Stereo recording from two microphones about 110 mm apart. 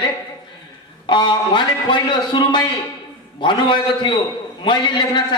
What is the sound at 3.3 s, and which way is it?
A man's voice, 45° left (ahead or behind).